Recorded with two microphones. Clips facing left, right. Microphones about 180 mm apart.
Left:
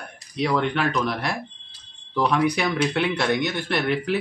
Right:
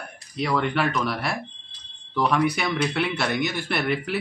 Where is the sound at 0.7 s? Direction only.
5° right (ahead or behind).